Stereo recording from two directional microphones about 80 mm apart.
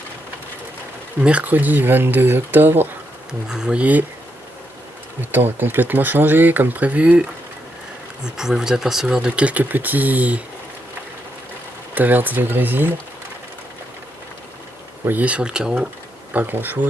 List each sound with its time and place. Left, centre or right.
1.2 s speech: centre
3.5 s speech: centre
5.3 s speech: right
8.2 s speech: centre
11.9 s speech: right
15.0 s speech: centre
16.3 s speech: right